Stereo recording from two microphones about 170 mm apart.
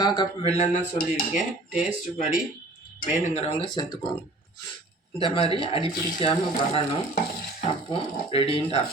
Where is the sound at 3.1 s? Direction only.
45° left (ahead or behind).